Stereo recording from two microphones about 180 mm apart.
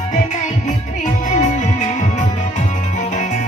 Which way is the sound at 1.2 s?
40° left (ahead or behind).